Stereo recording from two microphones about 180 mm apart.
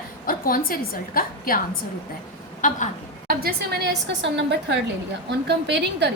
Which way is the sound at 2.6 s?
45° left (ahead or behind).